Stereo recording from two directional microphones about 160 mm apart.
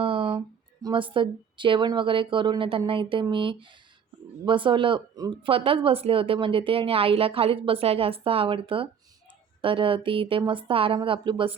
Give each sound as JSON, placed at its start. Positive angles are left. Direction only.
{"t": 0.0, "sound": "a woman's voice", "side_deg": -35}